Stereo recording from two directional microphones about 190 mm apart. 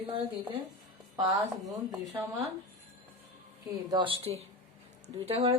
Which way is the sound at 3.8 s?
25° right (ahead or behind).